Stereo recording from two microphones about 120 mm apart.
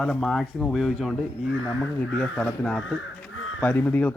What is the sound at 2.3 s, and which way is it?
Speech, 5° left (ahead or behind).